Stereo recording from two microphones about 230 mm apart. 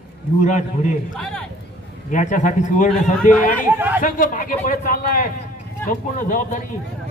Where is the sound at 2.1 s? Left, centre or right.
Left.